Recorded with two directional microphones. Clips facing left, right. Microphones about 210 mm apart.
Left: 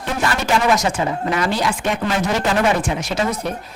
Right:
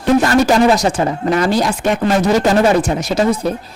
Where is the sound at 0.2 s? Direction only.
40° right (ahead or behind).